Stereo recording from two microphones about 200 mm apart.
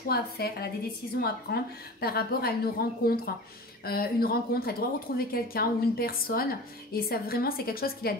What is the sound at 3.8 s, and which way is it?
A woman's voice, 50° left (ahead or behind).